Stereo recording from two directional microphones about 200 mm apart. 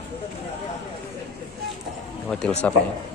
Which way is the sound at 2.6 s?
10° left (ahead or behind).